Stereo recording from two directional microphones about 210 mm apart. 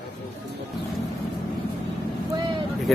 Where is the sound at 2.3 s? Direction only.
20° right (ahead or behind).